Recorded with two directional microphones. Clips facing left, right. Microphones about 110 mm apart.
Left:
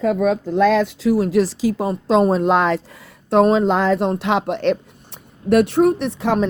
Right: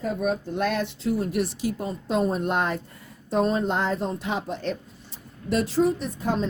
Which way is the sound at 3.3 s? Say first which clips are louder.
Left 9 dB; 75° left (ahead or behind).